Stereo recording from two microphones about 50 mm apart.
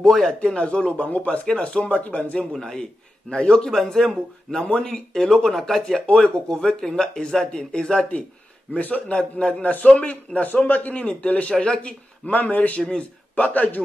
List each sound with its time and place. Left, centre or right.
0.0 s speech: centre
0.3 s speech: left
2.6 s speech: centre
3.7 s speech: centre
8.7 s a man's voice: left